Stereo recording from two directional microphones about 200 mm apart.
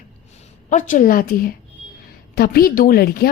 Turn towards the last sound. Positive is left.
turn(degrees=50)  # may be behind; listen again after turning